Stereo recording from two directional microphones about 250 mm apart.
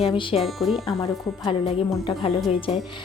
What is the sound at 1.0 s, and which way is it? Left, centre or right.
Speech, centre.